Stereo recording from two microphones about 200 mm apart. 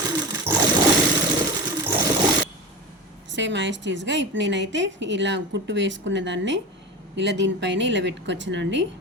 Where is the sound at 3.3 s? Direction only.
65° right (ahead or behind).